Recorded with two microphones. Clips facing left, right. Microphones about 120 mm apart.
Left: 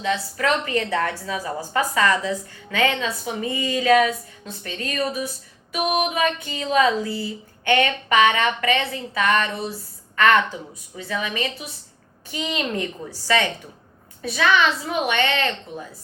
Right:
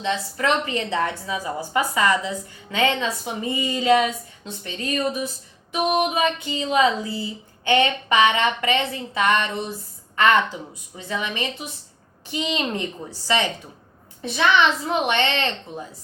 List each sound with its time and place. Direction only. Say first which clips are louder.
0.0 s a woman's voice: left 1 dB; 25° right (ahead or behind)
10.9 s a woman's voice: left 1 dB; 25° right (ahead or behind)